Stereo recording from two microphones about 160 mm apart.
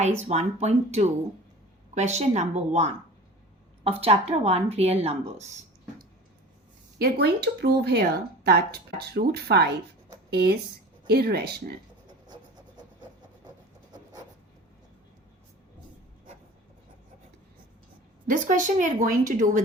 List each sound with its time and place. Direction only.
0.0 s a woman's voice: 45° right (ahead or behind)
7.0 s speech: 90° right
12.0 s a sound: 25° right (ahead or behind)
18.3 s speech: 55° right (ahead or behind)